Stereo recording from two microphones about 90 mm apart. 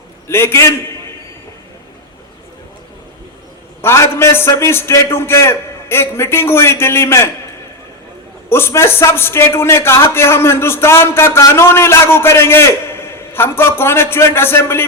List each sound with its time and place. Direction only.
0.3 s a man's voice: 30° left (ahead or behind)
3.8 s a man's voice: 25° left (ahead or behind)
8.4 s a man's voice: 25° left (ahead or behind)